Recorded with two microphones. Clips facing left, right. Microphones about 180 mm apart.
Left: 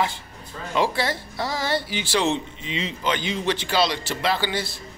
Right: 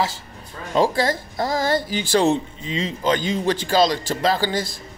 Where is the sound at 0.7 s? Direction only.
45° right (ahead or behind).